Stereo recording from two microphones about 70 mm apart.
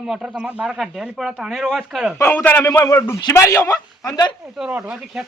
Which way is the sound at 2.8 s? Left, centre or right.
Left.